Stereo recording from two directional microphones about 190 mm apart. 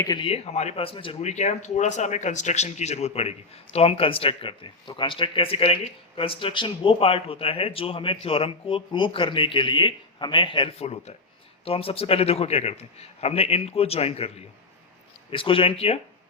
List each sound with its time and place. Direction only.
0.0 s a man's voice: 25° left (ahead or behind)